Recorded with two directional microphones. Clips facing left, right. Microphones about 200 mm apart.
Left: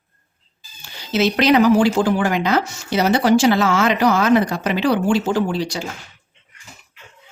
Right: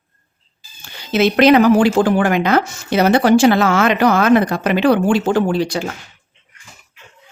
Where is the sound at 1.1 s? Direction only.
55° right (ahead or behind).